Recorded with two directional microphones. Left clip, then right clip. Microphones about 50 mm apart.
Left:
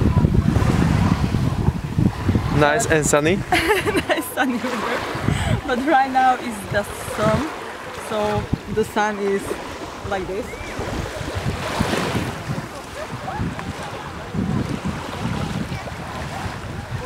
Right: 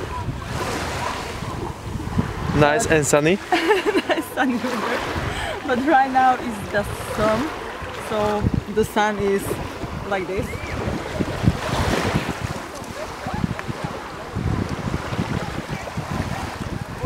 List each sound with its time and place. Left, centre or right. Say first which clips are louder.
0.6 s waves: right 1 dB; right
2.5 s speech: even; centre
3.5 s a sound: left 1 dB; left
4.8 s speech: even; centre
5.3 s speech: left 1 dB; centre
6.8 s speech: even; centre
8.7 s speech: even; right
10.0 s speech: right 1 dB; right
11.7 s waves: left 1 dB; centre